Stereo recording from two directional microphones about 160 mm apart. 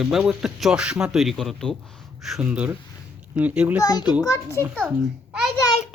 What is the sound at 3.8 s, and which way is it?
Speech, 25° left (ahead or behind).